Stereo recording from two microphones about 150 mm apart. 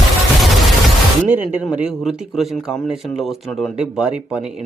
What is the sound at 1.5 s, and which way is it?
Speech, 5° right (ahead or behind).